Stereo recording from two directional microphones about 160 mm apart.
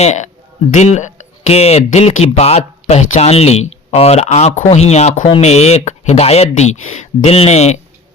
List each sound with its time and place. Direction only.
0.0 s speech: 45° left (ahead or behind)